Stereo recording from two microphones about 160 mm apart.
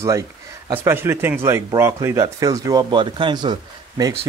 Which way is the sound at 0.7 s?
15° right (ahead or behind).